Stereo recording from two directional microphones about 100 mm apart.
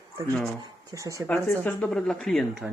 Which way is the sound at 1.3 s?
20° left (ahead or behind).